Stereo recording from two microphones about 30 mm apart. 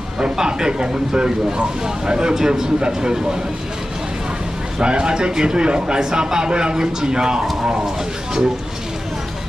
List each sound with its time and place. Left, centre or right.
0.2 s speech: right
4.8 s speech: right